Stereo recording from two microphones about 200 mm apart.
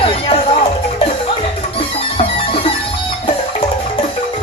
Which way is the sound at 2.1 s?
30° left (ahead or behind).